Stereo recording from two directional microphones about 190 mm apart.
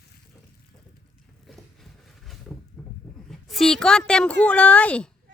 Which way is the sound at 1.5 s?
Centre (ahead or behind).